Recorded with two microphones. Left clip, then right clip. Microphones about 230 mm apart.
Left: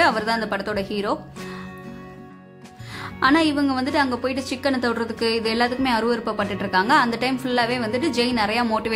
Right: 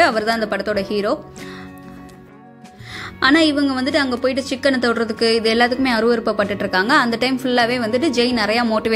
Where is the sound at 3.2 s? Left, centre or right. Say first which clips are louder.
Right 4 dB; centre.